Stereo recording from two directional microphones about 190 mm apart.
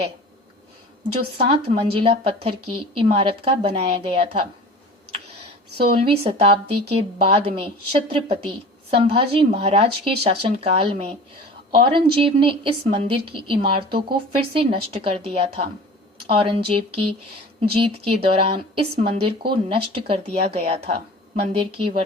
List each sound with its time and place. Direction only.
1.4 s a woman's voice: 30° right (ahead or behind)
6.1 s a woman's voice: 30° right (ahead or behind)